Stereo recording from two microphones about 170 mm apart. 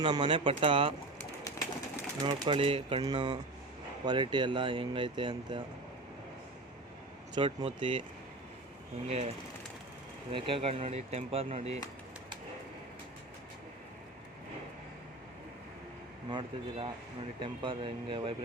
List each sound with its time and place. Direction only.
0.0 s speech: 30° right (ahead or behind)
2.2 s speech: 30° right (ahead or behind)
7.3 s speech: 30° right (ahead or behind)
9.0 s speech: 35° right (ahead or behind)
10.3 s speech: 30° right (ahead or behind)
16.3 s speech: 30° right (ahead or behind)